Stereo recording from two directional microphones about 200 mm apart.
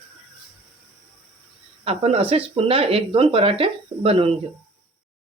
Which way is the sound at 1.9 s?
30° right (ahead or behind).